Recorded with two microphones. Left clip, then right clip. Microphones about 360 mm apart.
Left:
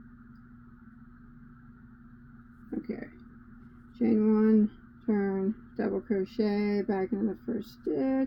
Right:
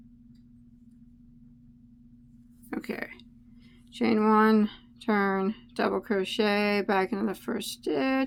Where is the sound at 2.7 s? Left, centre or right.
Right.